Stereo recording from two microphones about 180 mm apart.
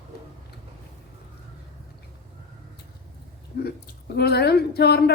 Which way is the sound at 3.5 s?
65° left (ahead or behind).